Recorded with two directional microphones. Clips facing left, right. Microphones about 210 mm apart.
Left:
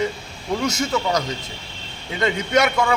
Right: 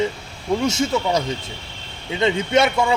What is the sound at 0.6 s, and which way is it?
A man's voice, 30° right (ahead or behind).